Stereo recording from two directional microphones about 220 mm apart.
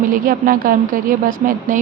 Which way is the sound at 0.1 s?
40° right (ahead or behind).